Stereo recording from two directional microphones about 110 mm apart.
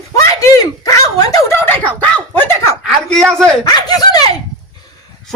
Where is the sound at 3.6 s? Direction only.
35° left (ahead or behind).